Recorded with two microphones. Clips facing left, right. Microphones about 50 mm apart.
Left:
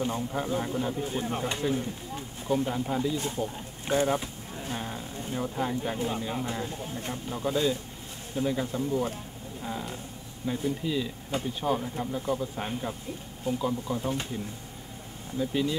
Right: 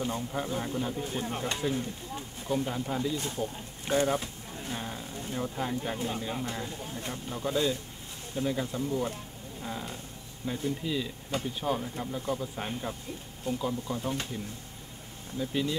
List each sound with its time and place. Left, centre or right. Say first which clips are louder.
0.0 s speech: left 2 dB; centre
4.1 s a sound: left 2 dB; centre
6.0 s speech: left 2 dB; centre